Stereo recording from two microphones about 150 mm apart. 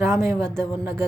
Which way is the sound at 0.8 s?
15° right (ahead or behind).